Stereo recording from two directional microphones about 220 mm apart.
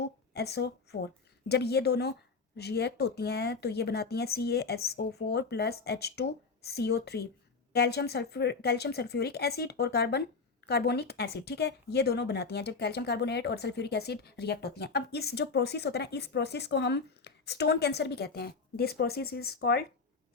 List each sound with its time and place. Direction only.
0.3 s a woman's voice: 50° left (ahead or behind)